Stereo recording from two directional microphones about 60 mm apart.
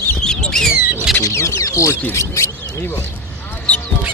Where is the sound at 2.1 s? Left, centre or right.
Left.